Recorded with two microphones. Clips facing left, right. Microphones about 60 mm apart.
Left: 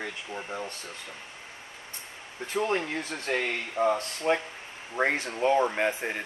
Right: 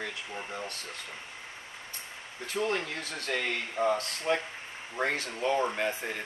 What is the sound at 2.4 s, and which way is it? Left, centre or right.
Speech, left.